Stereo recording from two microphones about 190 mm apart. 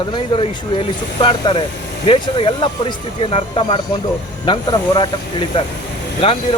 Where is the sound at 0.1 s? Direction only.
25° left (ahead or behind).